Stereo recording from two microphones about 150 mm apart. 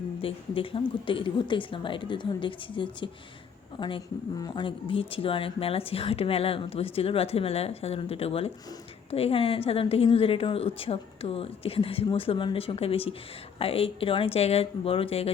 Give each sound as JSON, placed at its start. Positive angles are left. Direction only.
{"t": 0.2, "sound": "speech", "side_deg": 35}